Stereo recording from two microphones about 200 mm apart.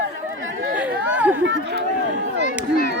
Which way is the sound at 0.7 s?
5° right (ahead or behind).